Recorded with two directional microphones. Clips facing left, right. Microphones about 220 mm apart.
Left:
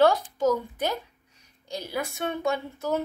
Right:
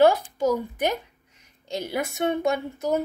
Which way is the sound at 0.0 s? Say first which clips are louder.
Right 2 dB; 10° right (ahead or behind).